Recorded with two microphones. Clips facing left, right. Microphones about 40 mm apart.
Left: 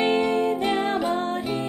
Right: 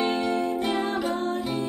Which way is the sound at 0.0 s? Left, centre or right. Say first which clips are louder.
Left 4 dB; left.